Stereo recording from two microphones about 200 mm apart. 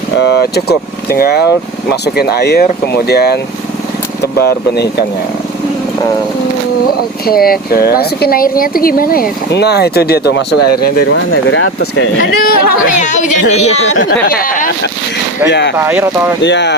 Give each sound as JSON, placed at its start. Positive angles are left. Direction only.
{"t": 0.2, "sound": "speech", "side_deg": 60}
{"t": 7.3, "sound": "speech", "side_deg": 50}
{"t": 11.4, "sound": "speech", "side_deg": 70}
{"t": 12.2, "sound": "speech", "side_deg": 50}
{"t": 14.1, "sound": "speech", "side_deg": 45}
{"t": 15.4, "sound": "speech", "side_deg": 60}
{"t": 15.8, "sound": "speech", "side_deg": -10}
{"t": 16.4, "sound": "speech", "side_deg": 60}